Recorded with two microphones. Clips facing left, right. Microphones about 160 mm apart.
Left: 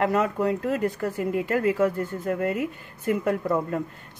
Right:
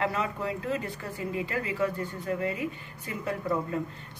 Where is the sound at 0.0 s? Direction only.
50° left (ahead or behind).